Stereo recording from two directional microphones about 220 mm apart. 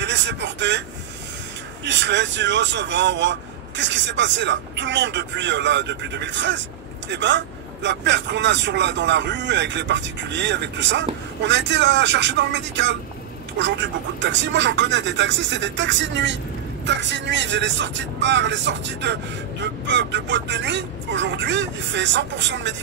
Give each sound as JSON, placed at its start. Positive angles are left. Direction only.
{"t": 0.0, "sound": "speech", "side_deg": -55}
{"t": 1.9, "sound": "speech", "side_deg": -55}